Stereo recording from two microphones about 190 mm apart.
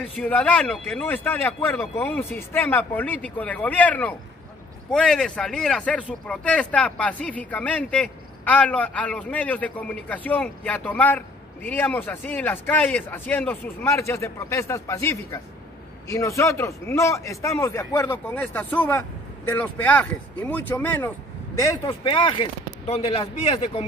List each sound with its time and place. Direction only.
0.1 s speech: 5° left (ahead or behind); by 23.8 s 30° left (ahead or behind)